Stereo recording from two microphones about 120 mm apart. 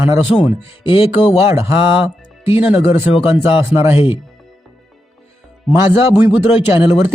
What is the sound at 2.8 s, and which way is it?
Speech, 50° left (ahead or behind).